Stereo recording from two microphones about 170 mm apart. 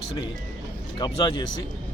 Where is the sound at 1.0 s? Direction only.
25° left (ahead or behind).